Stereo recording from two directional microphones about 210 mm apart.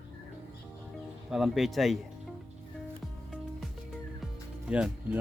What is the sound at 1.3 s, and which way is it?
Speech, centre (ahead or behind).